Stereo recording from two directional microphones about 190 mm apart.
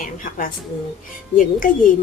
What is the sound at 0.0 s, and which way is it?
A woman's voice, 45° left (ahead or behind).